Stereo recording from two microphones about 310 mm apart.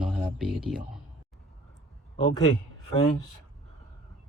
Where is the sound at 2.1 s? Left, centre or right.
Left.